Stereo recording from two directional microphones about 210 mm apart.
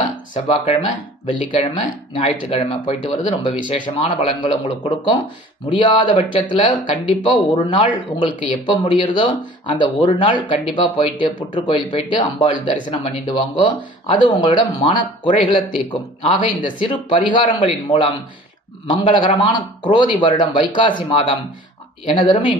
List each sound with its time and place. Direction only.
0.3 s speech: 25° left (ahead or behind)